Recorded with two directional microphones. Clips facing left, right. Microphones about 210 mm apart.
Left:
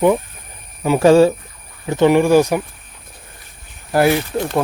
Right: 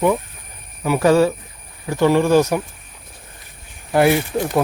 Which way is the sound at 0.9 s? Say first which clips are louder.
Left 4 dB; 25° left (ahead or behind).